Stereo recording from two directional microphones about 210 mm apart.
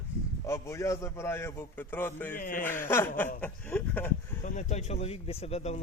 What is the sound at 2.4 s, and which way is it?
Speech, 40° left (ahead or behind).